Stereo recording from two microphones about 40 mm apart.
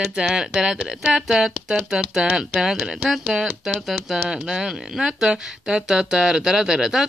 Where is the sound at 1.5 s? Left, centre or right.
Right.